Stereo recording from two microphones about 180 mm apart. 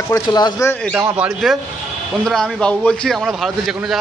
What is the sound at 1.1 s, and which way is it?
A man's voice, 5° right (ahead or behind).